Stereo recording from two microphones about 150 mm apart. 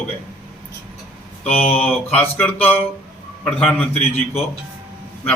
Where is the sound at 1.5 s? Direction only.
40° left (ahead or behind).